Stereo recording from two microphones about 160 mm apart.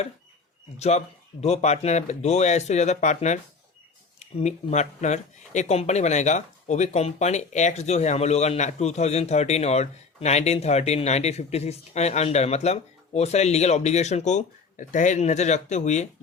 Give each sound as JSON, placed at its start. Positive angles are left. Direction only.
{"t": 0.8, "sound": "speech", "side_deg": 45}